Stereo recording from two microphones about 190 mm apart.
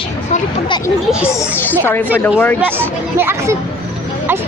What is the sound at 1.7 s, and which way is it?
Speech, 10° left (ahead or behind).